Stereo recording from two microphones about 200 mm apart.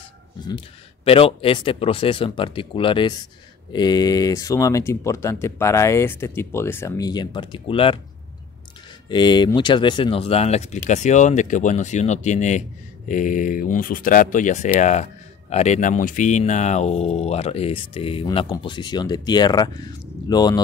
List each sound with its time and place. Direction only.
1.0 s speech: 30° left (ahead or behind)
9.1 s speech: 20° left (ahead or behind)